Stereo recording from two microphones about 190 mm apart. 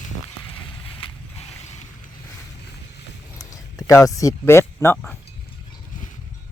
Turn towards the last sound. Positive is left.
turn(degrees=15)  # may be behind; listen again after turning